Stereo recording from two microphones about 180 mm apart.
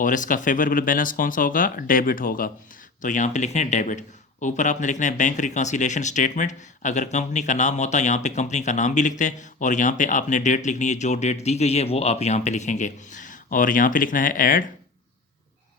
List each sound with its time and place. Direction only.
0.0 s speech: 45° left (ahead or behind)